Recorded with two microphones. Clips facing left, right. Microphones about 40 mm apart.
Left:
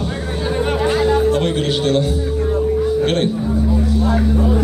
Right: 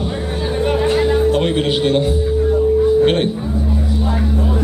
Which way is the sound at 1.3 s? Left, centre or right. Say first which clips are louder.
Right 1 dB; right.